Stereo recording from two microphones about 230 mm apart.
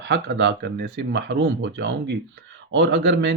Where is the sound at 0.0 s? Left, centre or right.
Right.